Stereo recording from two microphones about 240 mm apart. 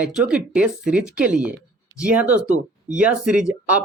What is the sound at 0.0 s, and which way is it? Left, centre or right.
Speech, centre.